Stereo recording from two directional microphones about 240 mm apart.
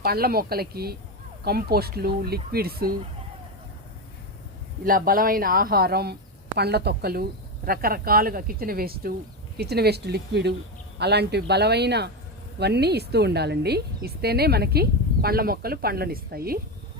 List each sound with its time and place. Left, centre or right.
0.0 s a woman's voice: right
4.9 s a woman's voice: right